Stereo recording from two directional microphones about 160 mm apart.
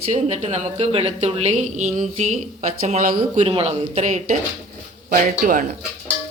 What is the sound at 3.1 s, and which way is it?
A woman's voice, 35° right (ahead or behind).